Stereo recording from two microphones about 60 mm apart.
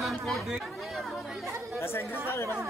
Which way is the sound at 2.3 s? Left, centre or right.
Left.